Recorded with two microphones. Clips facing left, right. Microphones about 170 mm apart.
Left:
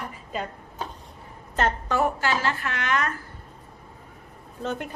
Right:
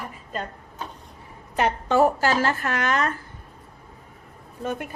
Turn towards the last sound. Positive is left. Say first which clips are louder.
# right 1 dB
turn(degrees=-10)  # may be behind; listen again after turning